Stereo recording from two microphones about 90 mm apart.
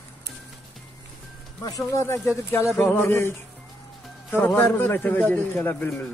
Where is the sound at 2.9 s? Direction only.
25° left (ahead or behind).